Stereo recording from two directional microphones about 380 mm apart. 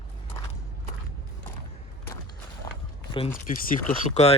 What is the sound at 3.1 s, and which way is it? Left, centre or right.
Speech, centre.